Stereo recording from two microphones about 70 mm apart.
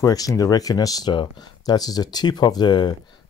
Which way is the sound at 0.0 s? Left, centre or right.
Left.